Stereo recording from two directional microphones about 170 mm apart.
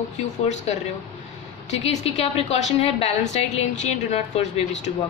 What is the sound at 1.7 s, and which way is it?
A woman's voice, 40° left (ahead or behind).